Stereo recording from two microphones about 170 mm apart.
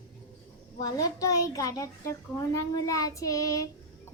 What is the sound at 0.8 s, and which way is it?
A child's voice, 20° left (ahead or behind).